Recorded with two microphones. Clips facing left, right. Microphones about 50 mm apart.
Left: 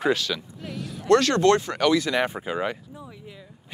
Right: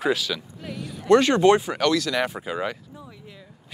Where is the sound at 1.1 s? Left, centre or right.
Centre.